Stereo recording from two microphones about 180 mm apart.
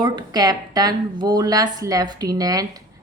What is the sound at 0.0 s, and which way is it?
A woman's voice, 25° right (ahead or behind).